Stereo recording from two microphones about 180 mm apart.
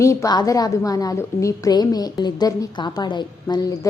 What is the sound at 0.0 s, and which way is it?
A woman's voice, 15° left (ahead or behind).